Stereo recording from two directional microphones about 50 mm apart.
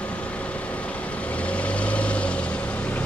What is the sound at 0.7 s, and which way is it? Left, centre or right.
Vehicle, left.